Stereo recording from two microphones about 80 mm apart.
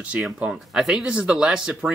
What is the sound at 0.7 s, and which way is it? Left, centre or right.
Speech, centre.